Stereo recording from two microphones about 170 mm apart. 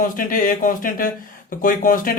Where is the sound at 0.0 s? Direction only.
50° left (ahead or behind).